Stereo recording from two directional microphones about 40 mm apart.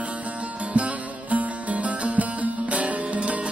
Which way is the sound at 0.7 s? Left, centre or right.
Right.